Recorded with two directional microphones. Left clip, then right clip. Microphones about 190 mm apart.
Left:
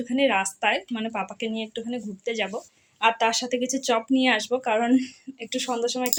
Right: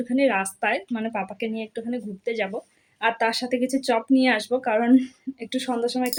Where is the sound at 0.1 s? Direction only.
20° right (ahead or behind).